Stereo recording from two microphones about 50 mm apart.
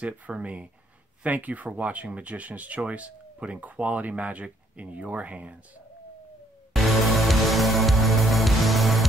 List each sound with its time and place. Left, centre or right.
0.0 s speech: right
6.7 s music: centre